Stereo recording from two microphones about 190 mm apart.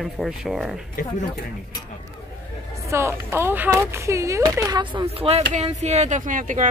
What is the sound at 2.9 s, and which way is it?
A woman's voice, 15° right (ahead or behind).